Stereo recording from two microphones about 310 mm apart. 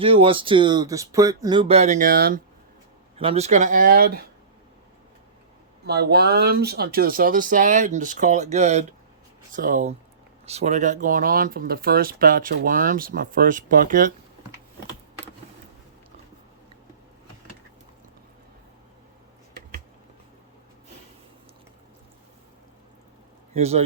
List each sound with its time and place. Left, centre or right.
0.0 s speech: centre
5.8 s speech: right
23.6 s speech: centre